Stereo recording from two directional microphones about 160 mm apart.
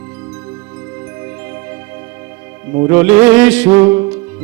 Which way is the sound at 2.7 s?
15° right (ahead or behind).